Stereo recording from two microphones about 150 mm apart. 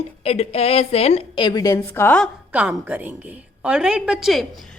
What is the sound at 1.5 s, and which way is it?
Speech, 25° left (ahead or behind).